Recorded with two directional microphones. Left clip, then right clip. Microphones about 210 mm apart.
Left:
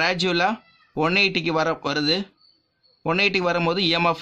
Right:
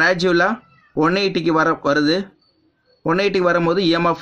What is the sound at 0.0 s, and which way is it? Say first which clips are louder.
Speech: right 5 dB; 30° left (ahead or behind).